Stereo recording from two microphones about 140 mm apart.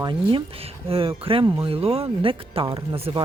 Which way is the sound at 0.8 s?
40° right (ahead or behind).